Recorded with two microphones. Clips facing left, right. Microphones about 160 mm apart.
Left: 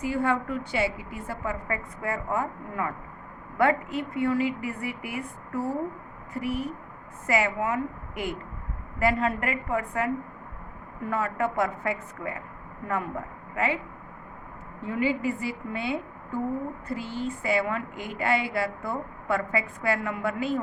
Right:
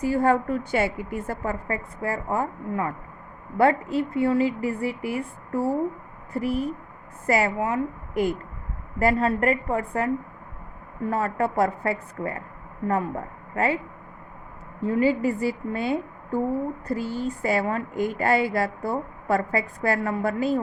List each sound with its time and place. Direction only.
0.0 s a woman's voice: 40° right (ahead or behind)
7.3 s a woman's voice: 40° right (ahead or behind)
11.1 s a woman's voice: 35° right (ahead or behind)
14.8 s a woman's voice: 35° right (ahead or behind)